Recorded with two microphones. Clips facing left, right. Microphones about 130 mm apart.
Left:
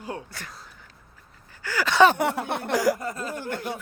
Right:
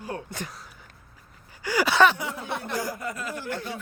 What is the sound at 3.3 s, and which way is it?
Speech, 50° left (ahead or behind).